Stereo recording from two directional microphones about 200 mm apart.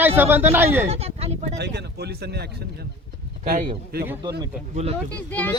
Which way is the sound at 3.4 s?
50° right (ahead or behind).